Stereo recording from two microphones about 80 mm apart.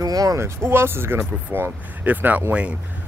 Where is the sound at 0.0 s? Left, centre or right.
Right.